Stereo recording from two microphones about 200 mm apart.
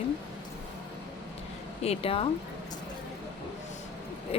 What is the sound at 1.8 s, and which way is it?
Speech, 30° left (ahead or behind).